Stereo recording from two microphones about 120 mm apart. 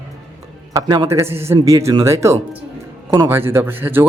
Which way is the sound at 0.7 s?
30° right (ahead or behind).